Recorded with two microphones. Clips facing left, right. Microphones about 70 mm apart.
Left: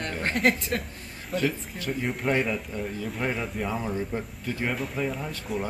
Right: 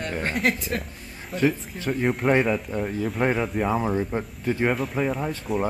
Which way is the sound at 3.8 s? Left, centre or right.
Right.